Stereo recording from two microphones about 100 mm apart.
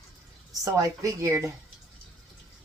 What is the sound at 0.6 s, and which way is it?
Speech, 35° right (ahead or behind).